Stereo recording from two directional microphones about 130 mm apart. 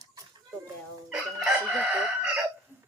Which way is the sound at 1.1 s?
5° right (ahead or behind).